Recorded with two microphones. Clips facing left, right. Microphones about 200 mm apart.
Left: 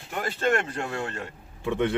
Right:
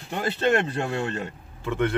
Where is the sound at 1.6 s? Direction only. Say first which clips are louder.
Even; 20° left (ahead or behind).